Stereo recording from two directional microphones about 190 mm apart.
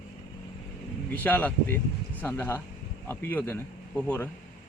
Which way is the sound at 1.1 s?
10° left (ahead or behind).